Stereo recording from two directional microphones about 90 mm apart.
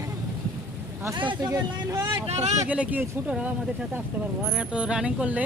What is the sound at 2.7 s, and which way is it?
Speech, 15° right (ahead or behind).